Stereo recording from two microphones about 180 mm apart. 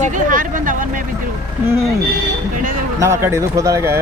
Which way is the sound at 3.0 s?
15° right (ahead or behind).